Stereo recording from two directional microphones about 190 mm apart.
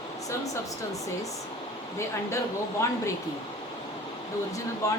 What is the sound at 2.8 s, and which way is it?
Speech, 15° left (ahead or behind).